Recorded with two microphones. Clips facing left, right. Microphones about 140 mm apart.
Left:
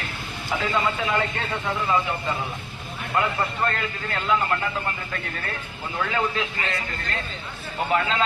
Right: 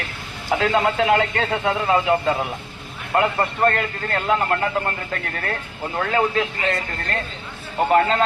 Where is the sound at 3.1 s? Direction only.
55° right (ahead or behind).